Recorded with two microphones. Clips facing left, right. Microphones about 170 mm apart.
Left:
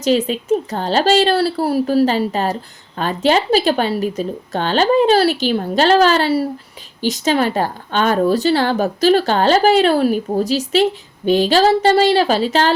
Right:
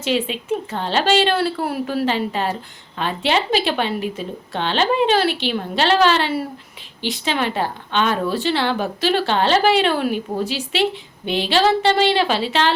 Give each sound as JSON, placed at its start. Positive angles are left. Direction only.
{"t": 0.0, "sound": "a woman's voice", "side_deg": 40}